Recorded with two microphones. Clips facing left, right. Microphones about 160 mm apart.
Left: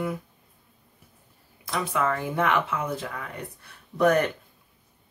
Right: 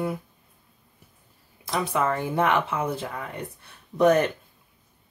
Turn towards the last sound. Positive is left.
turn(degrees=-20)  # may be behind; listen again after turning